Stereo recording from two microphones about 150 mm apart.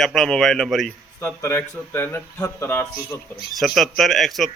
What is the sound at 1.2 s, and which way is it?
Speech, 15° left (ahead or behind).